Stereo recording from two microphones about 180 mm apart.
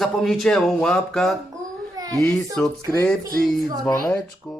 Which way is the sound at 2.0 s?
20° right (ahead or behind).